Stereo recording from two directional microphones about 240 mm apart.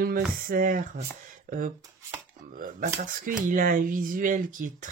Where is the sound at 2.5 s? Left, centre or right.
Right.